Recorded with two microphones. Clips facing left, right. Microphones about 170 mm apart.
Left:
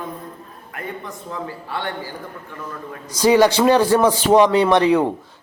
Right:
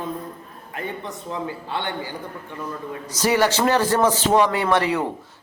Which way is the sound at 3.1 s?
10° left (ahead or behind).